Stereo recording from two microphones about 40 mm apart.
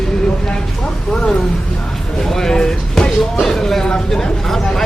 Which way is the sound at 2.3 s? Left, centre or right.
Centre.